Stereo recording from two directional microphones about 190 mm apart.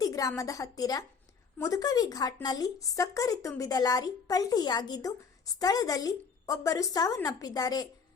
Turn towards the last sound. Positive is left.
turn(degrees=20)  # may be behind; listen again after turning